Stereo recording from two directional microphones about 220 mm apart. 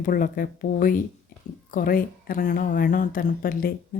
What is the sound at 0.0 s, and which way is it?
A woman's voice, 40° left (ahead or behind).